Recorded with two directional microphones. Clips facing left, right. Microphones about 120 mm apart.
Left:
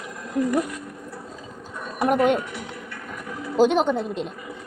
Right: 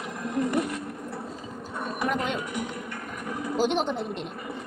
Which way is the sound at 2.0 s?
55° left (ahead or behind).